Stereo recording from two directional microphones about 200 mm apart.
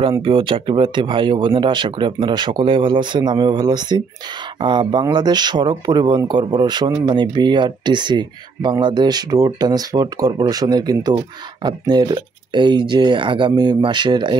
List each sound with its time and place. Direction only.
0.2 s speech: 25° right (ahead or behind)